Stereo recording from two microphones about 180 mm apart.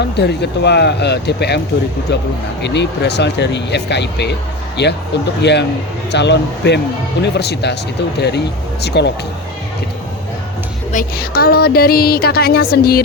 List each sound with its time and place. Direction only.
0.2 s speech: 70° left (ahead or behind)
8.8 s speech: 70° left (ahead or behind)
10.9 s speech: 55° left (ahead or behind)